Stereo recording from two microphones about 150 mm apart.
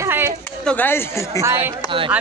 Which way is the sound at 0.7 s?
15° left (ahead or behind).